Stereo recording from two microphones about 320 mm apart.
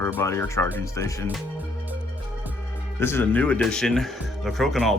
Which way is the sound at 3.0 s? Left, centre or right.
Centre.